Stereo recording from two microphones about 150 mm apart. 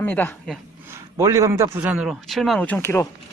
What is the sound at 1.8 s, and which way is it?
Speech, 5° right (ahead or behind).